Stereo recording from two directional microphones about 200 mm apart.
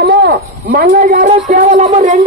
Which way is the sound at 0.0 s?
60° right (ahead or behind).